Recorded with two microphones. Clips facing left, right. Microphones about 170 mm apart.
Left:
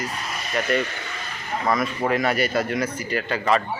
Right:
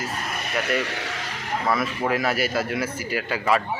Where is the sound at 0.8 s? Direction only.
85° right.